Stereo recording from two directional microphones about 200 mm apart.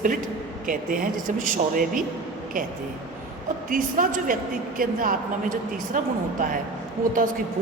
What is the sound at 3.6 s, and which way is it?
A woman's voice, 40° right (ahead or behind).